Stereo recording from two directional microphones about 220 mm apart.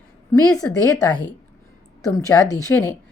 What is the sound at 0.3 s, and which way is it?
Speech, 15° left (ahead or behind).